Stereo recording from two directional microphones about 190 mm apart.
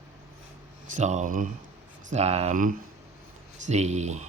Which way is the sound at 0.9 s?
40° right (ahead or behind).